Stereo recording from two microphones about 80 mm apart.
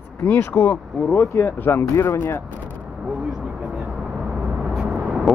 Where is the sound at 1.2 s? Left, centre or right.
Left.